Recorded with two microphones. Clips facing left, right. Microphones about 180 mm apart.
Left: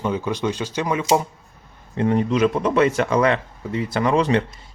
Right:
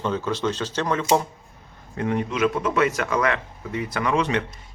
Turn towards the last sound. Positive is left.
turn(degrees=35)  # may be behind; listen again after turning